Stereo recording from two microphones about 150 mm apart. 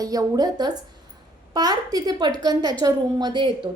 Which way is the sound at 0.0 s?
25° right (ahead or behind).